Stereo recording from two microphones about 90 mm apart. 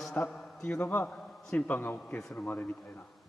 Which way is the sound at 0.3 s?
5° left (ahead or behind).